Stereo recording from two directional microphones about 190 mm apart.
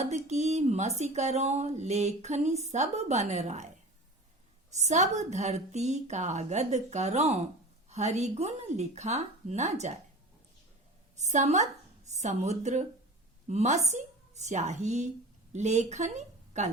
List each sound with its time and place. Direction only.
0.0 s speech: 35° right (ahead or behind)
4.7 s speech: 40° right (ahead or behind)
11.2 s a woman's voice: 35° right (ahead or behind)